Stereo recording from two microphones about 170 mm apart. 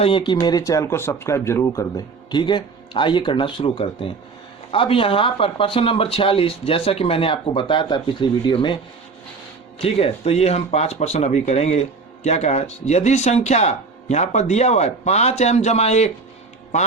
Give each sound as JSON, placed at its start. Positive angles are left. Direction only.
{"t": 0.0, "sound": "speech", "side_deg": 30}